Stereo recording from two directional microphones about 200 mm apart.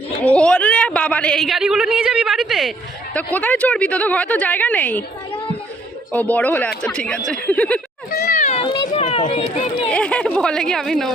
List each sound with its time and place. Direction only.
0.2 s a woman's voice: 5° left (ahead or behind)
6.1 s a woman's voice: 5° left (ahead or behind)
8.1 s a sound: 50° left (ahead or behind); by 9.0 s 30° left (ahead or behind)
9.0 s speech: 35° left (ahead or behind)
9.9 s a woman's voice: 5° left (ahead or behind)